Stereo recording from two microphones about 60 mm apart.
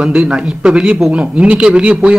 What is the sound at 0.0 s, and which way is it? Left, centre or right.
A man's voice, centre.